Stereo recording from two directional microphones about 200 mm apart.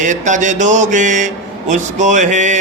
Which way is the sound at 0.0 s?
40° right (ahead or behind).